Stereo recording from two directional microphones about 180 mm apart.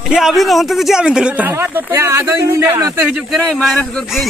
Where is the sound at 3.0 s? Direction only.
Centre (ahead or behind).